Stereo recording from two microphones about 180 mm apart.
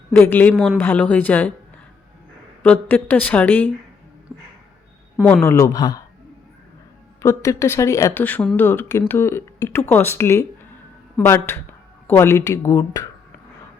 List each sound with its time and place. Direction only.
0.1 s speech: 10° left (ahead or behind)
2.6 s speech: 5° left (ahead or behind)
5.2 s speech: 10° left (ahead or behind)
7.2 s speech: 15° left (ahead or behind)